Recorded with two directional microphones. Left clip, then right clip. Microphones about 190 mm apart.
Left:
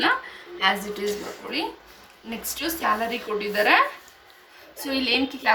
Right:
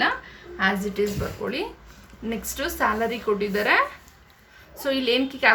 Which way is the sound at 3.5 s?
40° right (ahead or behind).